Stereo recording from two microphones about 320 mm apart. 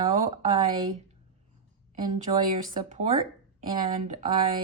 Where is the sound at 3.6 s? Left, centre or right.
Centre.